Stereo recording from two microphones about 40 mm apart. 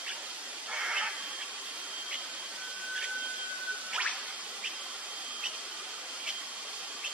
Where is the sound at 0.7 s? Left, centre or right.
Right.